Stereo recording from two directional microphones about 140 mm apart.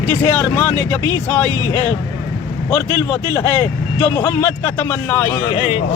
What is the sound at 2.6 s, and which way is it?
Speech, 15° left (ahead or behind).